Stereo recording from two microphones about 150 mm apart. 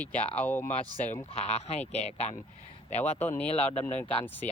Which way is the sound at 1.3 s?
45° left (ahead or behind).